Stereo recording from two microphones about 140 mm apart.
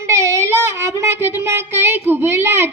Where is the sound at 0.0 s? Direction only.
20° right (ahead or behind).